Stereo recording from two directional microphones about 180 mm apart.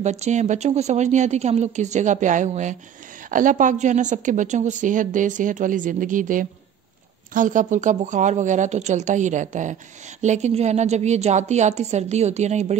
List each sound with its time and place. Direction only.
0.0 s a woman's voice: 40° right (ahead or behind)